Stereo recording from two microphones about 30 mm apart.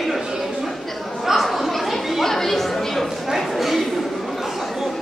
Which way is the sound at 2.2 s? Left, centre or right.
Centre.